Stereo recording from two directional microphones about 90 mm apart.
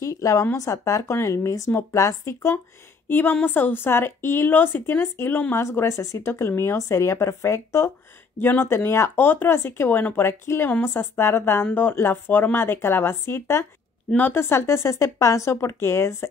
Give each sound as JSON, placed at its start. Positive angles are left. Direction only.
{"t": 0.0, "sound": "speech", "side_deg": 35}
{"t": 3.1, "sound": "a woman's voice", "side_deg": 20}